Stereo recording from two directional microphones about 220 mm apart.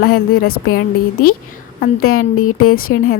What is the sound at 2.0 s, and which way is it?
Speech, 75° left (ahead or behind).